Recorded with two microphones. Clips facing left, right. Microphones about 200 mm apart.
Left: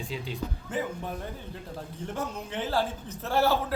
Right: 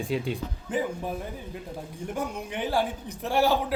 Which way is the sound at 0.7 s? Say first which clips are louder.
Right 4 dB; 15° right (ahead or behind).